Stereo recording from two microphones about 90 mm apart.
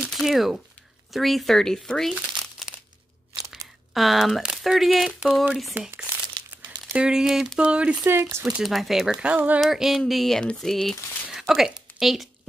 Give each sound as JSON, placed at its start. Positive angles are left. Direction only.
{"t": 0.1, "sound": "speech", "side_deg": 0}
{"t": 3.5, "sound": "speech", "side_deg": 0}
{"t": 6.9, "sound": "speech", "side_deg": -10}
{"t": 8.1, "sound": "speech", "side_deg": -30}
{"t": 8.6, "sound": "speech", "side_deg": 0}
{"t": 9.6, "sound": "speech", "side_deg": 0}